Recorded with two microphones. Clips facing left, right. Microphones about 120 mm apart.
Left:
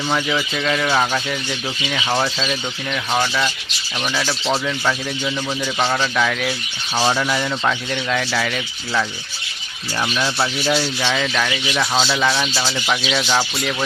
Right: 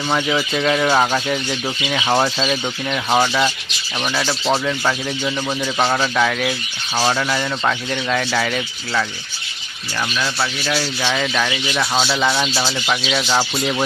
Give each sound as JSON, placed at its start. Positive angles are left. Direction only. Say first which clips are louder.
{"t": 0.2, "sound": "speech", "louder": "right 2 dB", "side_deg": -10}
{"t": 10.2, "sound": "speech", "louder": "left 2 dB", "side_deg": 20}
{"t": 10.8, "sound": "speech", "louder": "even", "side_deg": -5}
{"t": 13.6, "sound": "speech", "louder": "right 3 dB", "side_deg": -15}